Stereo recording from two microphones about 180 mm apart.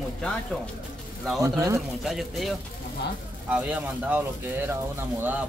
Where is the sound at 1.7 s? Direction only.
Centre (ahead or behind).